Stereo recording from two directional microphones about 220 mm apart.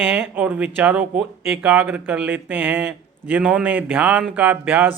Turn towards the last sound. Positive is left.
turn(degrees=-10)  # may be behind; listen again after turning